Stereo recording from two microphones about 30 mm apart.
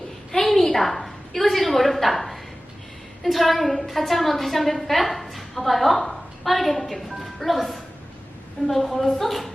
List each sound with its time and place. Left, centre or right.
0.3 s a woman's voice: centre